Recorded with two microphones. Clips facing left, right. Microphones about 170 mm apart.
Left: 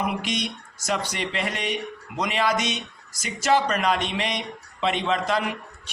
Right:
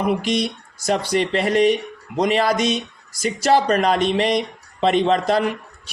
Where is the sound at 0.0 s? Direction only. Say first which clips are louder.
Right 7 dB; 35° right (ahead or behind).